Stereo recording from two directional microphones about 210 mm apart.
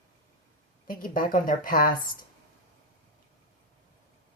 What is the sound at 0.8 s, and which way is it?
A woman's voice, 40° left (ahead or behind).